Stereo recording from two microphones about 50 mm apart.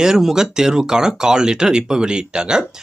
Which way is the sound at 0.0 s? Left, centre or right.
Centre.